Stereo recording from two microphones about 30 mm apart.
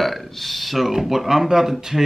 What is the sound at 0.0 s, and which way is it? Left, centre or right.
Speech, centre.